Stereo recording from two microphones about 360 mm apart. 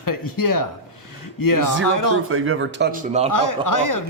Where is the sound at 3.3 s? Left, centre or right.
Left.